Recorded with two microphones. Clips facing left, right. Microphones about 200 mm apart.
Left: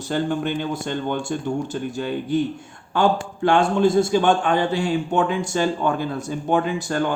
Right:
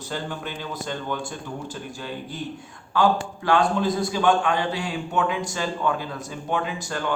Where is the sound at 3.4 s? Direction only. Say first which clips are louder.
Left 4 dB; 25° left (ahead or behind).